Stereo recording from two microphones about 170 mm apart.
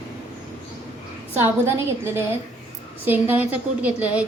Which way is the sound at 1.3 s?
15° right (ahead or behind).